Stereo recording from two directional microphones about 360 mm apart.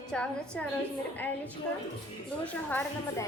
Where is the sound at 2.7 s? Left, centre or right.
Centre.